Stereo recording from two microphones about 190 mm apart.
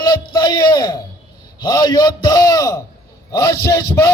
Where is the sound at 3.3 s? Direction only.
15° left (ahead or behind).